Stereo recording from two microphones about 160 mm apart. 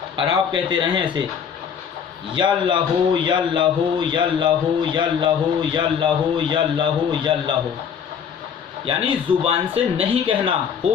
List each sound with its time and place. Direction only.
0.2 s a man's voice: 30° right (ahead or behind)
2.3 s a man's voice: 30° right (ahead or behind)
8.9 s speech: 35° right (ahead or behind)